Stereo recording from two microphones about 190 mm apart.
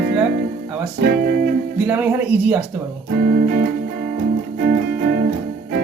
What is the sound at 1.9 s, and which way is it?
Speech, 10° right (ahead or behind).